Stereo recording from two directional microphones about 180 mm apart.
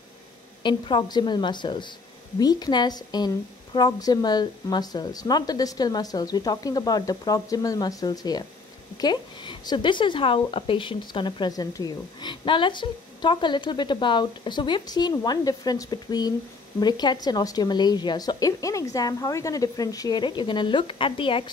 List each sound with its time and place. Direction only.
0.7 s speech: 25° left (ahead or behind)